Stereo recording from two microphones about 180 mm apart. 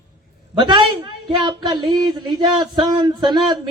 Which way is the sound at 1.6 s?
25° right (ahead or behind).